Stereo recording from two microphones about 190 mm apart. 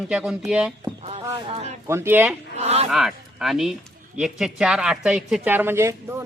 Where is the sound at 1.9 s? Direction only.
10° right (ahead or behind).